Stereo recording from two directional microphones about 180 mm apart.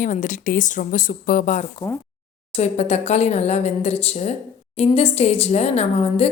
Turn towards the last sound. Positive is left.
turn(degrees=35)  # may be behind; listen again after turning